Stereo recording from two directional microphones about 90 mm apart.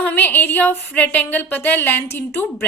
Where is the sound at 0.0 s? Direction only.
20° left (ahead or behind).